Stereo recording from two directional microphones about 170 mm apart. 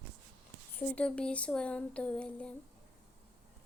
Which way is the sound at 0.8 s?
5° left (ahead or behind).